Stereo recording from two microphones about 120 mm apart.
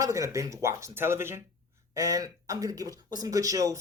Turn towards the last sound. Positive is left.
turn(degrees=-30)  # may be behind; listen again after turning